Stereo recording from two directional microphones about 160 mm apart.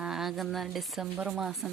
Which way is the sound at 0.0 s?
Centre (ahead or behind).